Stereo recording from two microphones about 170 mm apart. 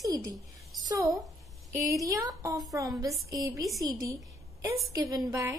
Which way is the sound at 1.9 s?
20° right (ahead or behind).